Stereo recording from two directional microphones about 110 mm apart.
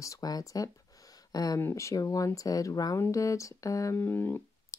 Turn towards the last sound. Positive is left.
turn(degrees=20)  # may be behind; listen again after turning